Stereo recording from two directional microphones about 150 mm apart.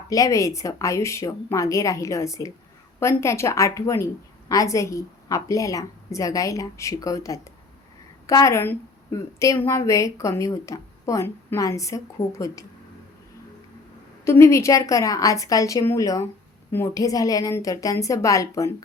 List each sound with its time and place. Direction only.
0.1 s a woman's voice: 20° left (ahead or behind)
14.3 s a woman's voice: 20° left (ahead or behind)